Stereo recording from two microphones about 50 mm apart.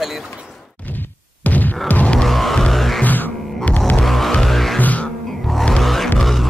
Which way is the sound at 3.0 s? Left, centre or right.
Left.